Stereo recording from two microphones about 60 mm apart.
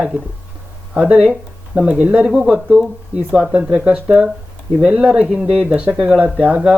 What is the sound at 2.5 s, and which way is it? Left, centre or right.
Speech, centre.